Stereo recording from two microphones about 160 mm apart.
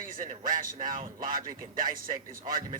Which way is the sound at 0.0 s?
60° right (ahead or behind).